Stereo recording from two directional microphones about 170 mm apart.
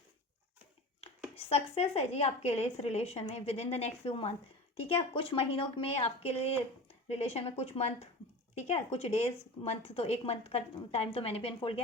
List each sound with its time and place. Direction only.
1.0 s speech: 40° left (ahead or behind)